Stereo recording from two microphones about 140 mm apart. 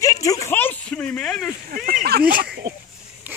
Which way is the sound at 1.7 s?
90° right.